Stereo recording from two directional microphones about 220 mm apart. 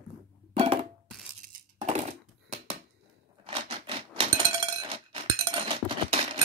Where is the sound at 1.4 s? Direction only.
30° right (ahead or behind).